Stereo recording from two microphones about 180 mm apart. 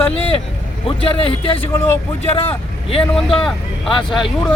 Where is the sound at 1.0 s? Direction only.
30° left (ahead or behind).